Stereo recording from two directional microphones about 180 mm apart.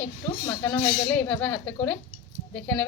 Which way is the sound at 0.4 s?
15° left (ahead or behind).